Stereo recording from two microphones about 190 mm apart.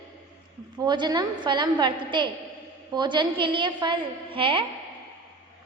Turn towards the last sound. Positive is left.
turn(degrees=-25)  # may be behind; listen again after turning